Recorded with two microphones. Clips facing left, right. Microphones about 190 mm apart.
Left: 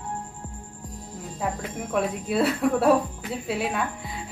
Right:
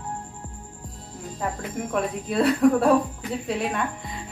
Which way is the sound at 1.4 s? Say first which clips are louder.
Right 1 dB; 5° left (ahead or behind).